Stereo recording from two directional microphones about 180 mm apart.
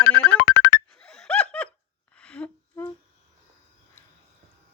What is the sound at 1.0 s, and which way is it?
Laughter, 5° left (ahead or behind).